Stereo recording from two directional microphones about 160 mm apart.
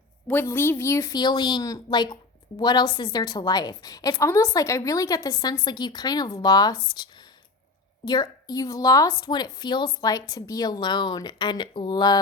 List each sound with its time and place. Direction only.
0.3 s a woman's voice: 15° left (ahead or behind)